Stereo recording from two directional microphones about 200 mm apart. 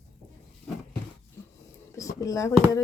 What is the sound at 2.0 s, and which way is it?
Speech, 15° left (ahead or behind).